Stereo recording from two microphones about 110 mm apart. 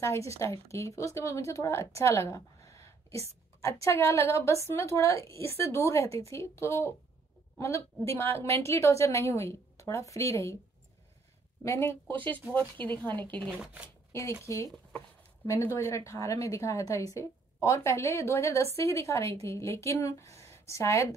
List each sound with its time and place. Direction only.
0.0 s a woman's voice: 25° left (ahead or behind)
11.6 s a woman's voice: 25° left (ahead or behind)
13.5 s speech: 10° right (ahead or behind)
14.1 s a woman's voice: 25° left (ahead or behind)